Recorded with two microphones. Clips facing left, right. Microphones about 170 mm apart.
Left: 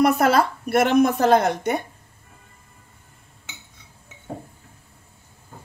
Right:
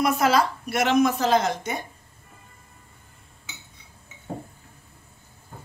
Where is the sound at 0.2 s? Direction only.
55° left (ahead or behind).